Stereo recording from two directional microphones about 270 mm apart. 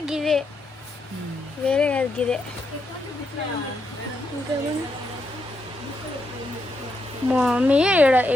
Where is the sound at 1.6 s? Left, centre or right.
Centre.